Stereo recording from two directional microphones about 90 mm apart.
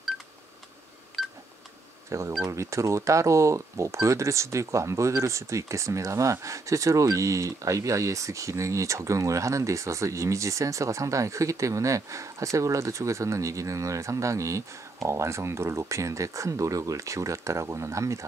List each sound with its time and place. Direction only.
1.2 s telephone dialing: 5° right (ahead or behind)
2.0 s speech: 35° right (ahead or behind)